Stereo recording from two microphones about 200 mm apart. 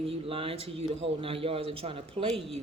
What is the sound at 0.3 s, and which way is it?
Speech, 30° right (ahead or behind).